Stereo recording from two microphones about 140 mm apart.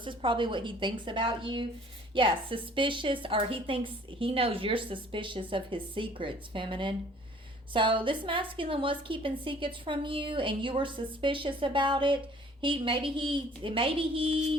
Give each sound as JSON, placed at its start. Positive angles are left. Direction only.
{"t": 0.0, "sound": "a woman's voice", "side_deg": -35}